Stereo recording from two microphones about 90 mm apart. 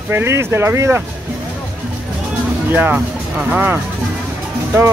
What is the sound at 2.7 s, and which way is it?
Speech, 20° right (ahead or behind).